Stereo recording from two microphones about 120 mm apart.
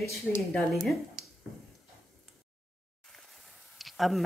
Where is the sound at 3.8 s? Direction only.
Centre (ahead or behind).